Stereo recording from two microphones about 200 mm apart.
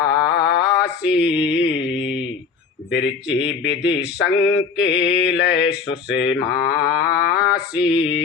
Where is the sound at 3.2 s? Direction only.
60° left (ahead or behind).